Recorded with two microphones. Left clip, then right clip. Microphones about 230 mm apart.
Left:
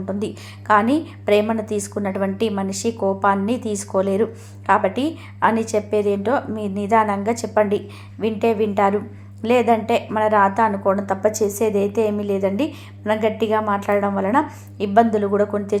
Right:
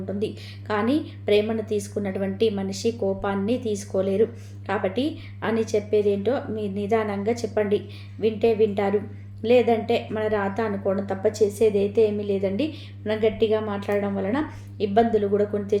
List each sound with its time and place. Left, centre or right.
0.7 s a woman's voice: centre